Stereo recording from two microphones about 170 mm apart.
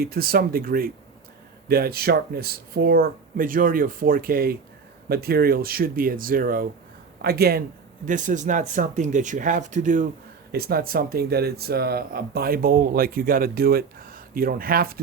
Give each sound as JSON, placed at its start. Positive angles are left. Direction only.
{"t": 0.0, "sound": "speech", "side_deg": -60}
{"t": 8.0, "sound": "speech", "side_deg": -50}
{"t": 10.5, "sound": "speech", "side_deg": -65}